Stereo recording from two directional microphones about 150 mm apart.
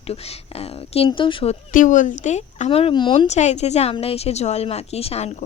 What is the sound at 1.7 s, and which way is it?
Speech, 60° left (ahead or behind).